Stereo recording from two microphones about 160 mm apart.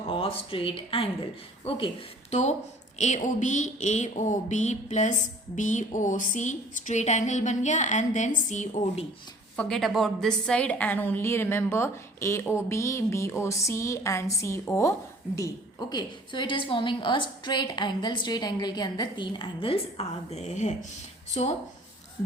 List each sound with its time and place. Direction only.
0.1 s a woman's voice: 35° left (ahead or behind)
9.6 s a woman's voice: 5° left (ahead or behind)
15.9 s a woman's voice: 30° left (ahead or behind); by 21.5 s 45° left (ahead or behind)